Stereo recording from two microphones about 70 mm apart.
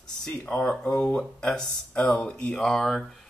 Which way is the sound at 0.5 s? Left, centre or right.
Left.